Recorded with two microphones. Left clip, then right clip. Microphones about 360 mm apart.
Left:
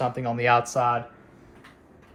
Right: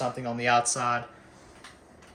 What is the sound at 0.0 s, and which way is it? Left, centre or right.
Speech, centre.